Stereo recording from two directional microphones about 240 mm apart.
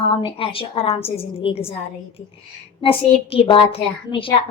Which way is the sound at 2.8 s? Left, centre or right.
Left.